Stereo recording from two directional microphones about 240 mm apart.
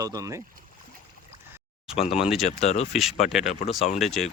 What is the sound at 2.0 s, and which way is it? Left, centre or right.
Speech, left.